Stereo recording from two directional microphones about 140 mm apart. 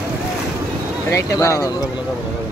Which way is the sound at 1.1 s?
20° left (ahead or behind).